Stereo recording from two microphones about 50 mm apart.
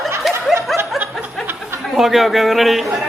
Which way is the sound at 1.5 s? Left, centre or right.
Right.